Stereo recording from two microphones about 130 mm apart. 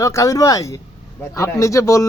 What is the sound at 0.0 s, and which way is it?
Speech, 25° left (ahead or behind).